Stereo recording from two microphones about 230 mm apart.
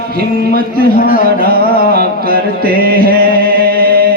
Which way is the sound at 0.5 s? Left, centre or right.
Right.